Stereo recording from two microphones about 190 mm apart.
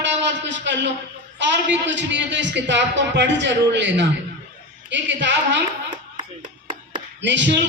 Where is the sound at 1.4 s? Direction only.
70° right (ahead or behind).